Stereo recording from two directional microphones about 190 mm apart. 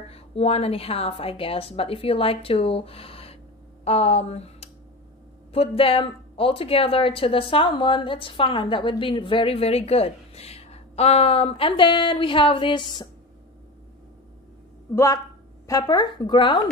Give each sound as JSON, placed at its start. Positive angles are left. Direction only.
{"t": 0.1, "sound": "speech", "side_deg": 30}
{"t": 15.6, "sound": "speech", "side_deg": 20}